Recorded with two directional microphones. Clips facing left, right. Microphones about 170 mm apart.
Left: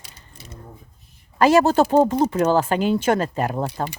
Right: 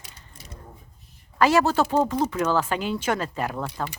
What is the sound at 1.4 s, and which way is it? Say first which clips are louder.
Speech: left 5 dB; 45° left (ahead or behind).